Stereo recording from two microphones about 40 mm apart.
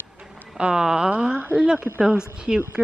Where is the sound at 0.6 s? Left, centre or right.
Centre.